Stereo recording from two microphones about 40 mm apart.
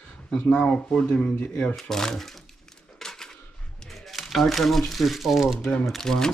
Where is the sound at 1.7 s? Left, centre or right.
Centre.